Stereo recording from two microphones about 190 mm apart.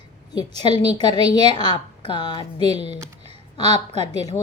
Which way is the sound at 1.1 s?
20° left (ahead or behind).